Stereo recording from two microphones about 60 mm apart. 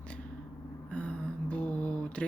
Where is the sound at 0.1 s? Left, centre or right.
Left.